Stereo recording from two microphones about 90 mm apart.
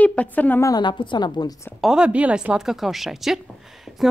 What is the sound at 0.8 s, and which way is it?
Speech, 60° left (ahead or behind).